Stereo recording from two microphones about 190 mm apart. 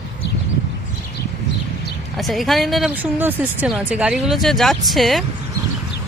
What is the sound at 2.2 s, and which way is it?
Speech, centre (ahead or behind).